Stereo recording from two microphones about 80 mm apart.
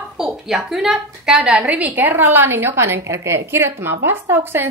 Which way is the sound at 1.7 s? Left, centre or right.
Right.